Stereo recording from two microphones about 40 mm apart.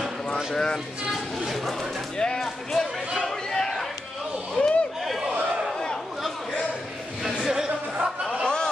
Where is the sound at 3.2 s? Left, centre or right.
Centre.